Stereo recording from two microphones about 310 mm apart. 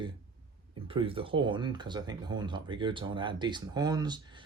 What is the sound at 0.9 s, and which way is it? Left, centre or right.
Speech, centre.